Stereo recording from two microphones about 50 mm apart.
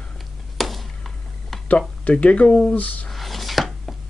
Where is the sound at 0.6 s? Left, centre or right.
Centre.